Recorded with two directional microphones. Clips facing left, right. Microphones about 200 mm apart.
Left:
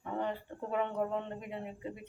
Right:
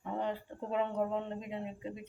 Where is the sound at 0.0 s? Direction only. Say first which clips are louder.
Even; 20° right (ahead or behind).